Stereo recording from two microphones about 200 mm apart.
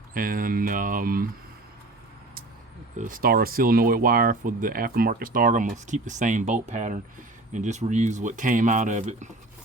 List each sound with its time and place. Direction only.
0.1 s speech: 45° right (ahead or behind)
3.0 s speech: 45° right (ahead or behind)